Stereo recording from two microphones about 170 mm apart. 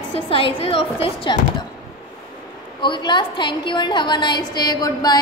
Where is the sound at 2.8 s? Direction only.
25° left (ahead or behind).